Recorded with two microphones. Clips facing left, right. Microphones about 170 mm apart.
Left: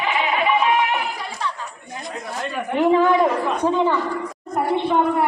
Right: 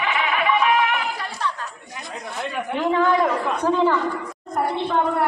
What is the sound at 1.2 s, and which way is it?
Chatter, 10° left (ahead or behind).